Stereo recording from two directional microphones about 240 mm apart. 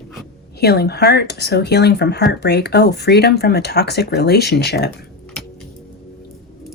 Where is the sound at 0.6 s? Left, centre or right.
Left.